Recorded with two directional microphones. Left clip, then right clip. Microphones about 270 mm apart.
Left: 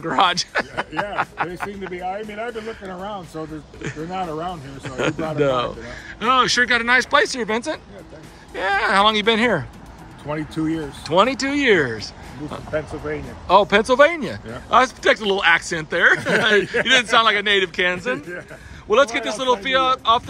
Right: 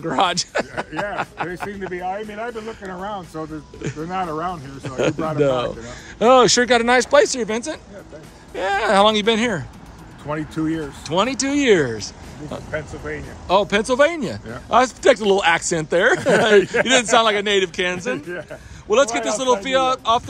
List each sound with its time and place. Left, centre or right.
0.0 s speech: centre